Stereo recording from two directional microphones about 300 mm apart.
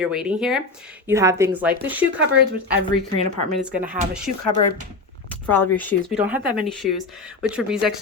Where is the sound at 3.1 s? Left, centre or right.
Left.